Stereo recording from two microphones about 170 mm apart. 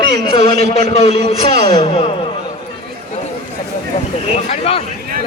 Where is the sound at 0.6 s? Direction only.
40° left (ahead or behind).